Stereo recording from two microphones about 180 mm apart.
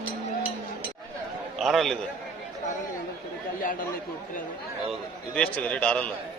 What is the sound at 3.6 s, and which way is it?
Speech, 50° left (ahead or behind).